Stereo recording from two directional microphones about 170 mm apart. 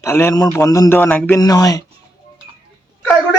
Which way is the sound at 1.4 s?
20° left (ahead or behind).